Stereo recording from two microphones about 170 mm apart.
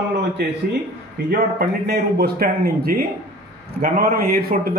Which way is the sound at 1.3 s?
65° right (ahead or behind).